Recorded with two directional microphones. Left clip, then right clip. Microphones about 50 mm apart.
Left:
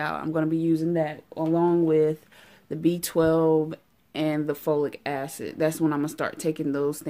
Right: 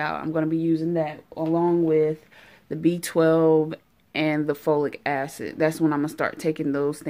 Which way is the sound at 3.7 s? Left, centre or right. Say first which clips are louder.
Right 5 dB; left.